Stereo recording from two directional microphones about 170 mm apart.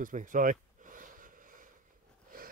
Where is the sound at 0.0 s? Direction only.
50° right (ahead or behind).